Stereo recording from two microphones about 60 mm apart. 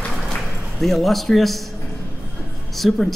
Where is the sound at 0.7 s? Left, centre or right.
Centre.